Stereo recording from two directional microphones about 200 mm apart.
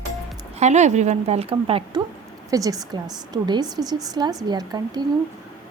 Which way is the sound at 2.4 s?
15° right (ahead or behind).